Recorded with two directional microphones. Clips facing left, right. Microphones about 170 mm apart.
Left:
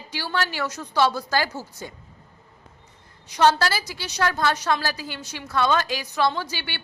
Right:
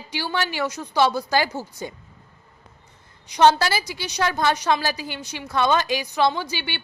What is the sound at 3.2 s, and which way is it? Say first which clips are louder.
A woman's voice: right 2 dB; 15° right (ahead or behind).